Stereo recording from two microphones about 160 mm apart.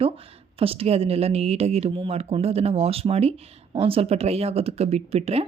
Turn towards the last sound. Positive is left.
turn(degrees=-40)  # may be behind; listen again after turning